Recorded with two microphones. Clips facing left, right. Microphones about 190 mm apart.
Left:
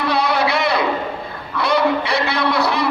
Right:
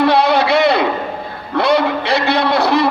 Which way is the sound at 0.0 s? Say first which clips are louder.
Right 6 dB; 60° right (ahead or behind).